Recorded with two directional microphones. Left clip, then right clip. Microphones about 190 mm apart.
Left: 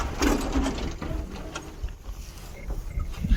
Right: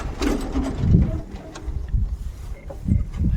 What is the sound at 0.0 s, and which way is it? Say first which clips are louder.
Mechanisms: even; 40° right (ahead or behind).